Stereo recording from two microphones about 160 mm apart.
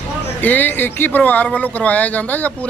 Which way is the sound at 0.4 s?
10° left (ahead or behind).